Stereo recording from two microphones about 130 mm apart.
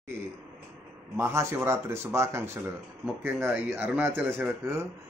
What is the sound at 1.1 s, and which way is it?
A man's voice, 20° right (ahead or behind).